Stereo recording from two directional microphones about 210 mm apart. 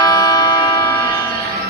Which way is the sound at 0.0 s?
15° left (ahead or behind).